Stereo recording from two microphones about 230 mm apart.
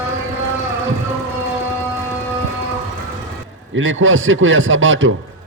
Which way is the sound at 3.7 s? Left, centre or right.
Right.